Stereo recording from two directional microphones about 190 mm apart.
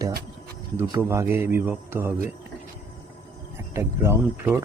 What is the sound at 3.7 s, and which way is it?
Speech, 15° right (ahead or behind).